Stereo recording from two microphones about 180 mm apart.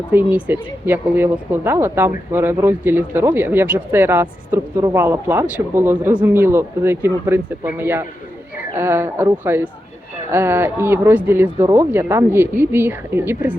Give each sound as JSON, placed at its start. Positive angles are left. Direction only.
{"t": 0.1, "sound": "speech", "side_deg": -10}